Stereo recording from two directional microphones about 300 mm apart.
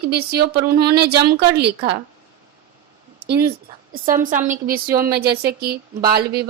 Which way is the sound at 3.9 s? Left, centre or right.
Right.